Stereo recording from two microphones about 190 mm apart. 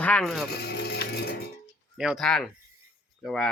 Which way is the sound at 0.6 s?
60° left (ahead or behind).